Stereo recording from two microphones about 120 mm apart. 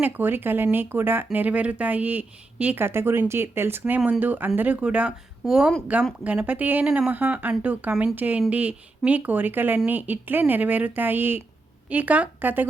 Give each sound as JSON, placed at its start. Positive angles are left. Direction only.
{"t": 0.0, "sound": "speech", "side_deg": -15}
{"t": 6.8, "sound": "speech", "side_deg": -5}
{"t": 7.1, "sound": "speech", "side_deg": -15}